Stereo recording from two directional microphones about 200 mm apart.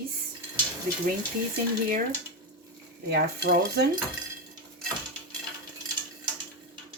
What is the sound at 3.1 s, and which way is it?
Speech, 55° right (ahead or behind).